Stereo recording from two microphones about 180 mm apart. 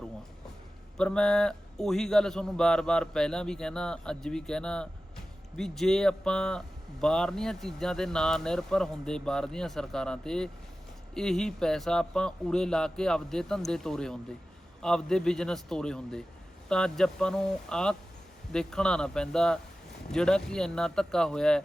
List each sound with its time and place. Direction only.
0.9 s a man's voice: 5° left (ahead or behind)